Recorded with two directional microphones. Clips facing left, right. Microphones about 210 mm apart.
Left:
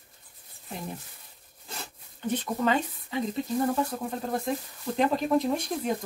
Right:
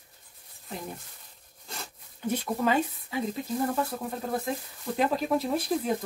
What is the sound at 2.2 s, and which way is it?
Speech, 10° right (ahead or behind).